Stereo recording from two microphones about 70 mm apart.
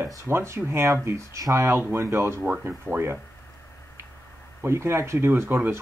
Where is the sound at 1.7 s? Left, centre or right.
Right.